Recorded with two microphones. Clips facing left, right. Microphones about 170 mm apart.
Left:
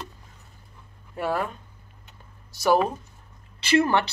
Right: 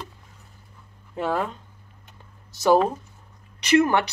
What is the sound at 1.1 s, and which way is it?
Speech, 20° right (ahead or behind).